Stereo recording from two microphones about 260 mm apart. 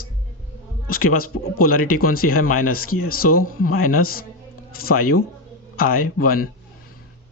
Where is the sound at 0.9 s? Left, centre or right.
Left.